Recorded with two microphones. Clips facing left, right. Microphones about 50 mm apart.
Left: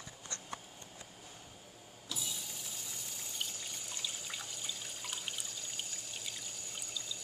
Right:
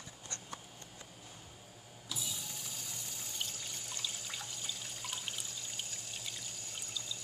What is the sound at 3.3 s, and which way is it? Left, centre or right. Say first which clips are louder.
Water: left 1 dB; centre.